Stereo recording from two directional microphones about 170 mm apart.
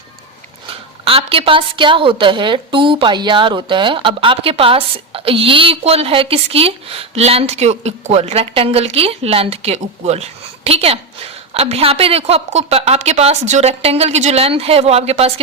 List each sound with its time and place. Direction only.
0.7 s a woman's voice: 35° right (ahead or behind)